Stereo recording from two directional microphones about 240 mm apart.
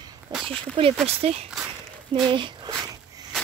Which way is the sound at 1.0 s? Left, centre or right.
Right.